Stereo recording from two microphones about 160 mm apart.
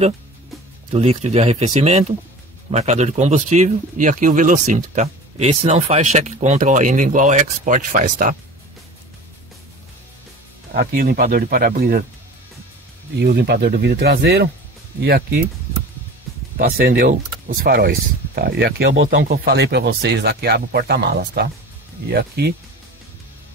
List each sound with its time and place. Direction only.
0.9 s speech: 40° right (ahead or behind); by 8.4 s 60° right (ahead or behind)
10.7 s speech: 70° right (ahead or behind)
13.2 s speech: 90° right
15.0 s speech: 75° right (ahead or behind)
16.5 s speech: 70° right (ahead or behind); by 22.5 s 90° right